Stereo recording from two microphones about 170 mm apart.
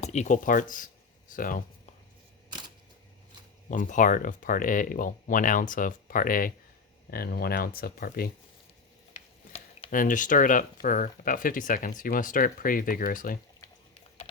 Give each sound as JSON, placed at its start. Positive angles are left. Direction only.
{"t": 0.0, "sound": "speech", "side_deg": 40}
{"t": 3.7, "sound": "speech", "side_deg": 50}
{"t": 9.9, "sound": "speech", "side_deg": 55}